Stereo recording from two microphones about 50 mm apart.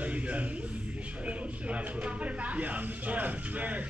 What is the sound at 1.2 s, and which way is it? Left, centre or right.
Speech, right.